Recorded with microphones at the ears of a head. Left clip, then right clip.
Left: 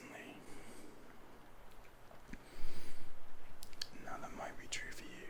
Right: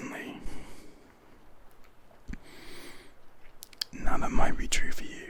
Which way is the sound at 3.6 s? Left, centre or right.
Right.